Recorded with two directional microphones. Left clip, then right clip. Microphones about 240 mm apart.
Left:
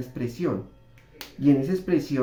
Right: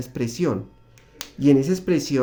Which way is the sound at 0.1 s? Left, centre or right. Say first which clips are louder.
Right 5 dB; right.